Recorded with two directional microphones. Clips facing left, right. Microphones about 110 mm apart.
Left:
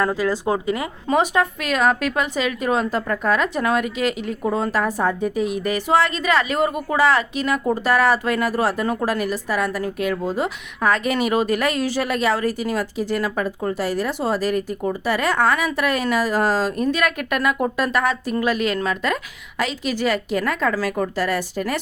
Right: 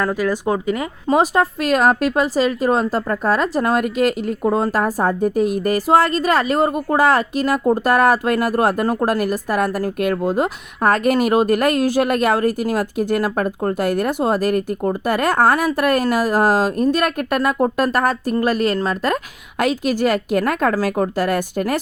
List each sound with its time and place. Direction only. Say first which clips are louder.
0.0 s speech: right 1 dB; 15° left (ahead or behind)
1.0 s a woman's voice: right 3 dB; 35° right (ahead or behind)